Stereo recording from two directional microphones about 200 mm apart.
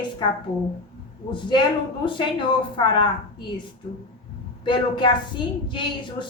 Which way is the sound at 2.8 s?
25° left (ahead or behind).